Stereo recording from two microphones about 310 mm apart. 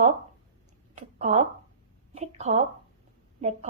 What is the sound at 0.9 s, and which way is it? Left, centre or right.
A woman's voice, right.